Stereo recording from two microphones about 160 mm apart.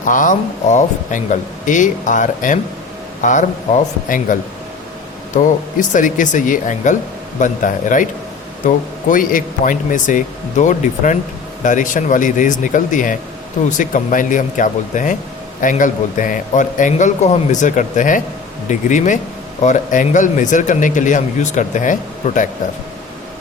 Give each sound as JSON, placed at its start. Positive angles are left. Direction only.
{"t": 0.0, "sound": "speech", "side_deg": 55}
{"t": 5.9, "sound": "speech", "side_deg": 55}